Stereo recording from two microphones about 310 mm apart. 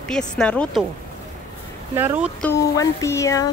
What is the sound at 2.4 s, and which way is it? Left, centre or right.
Speech, centre.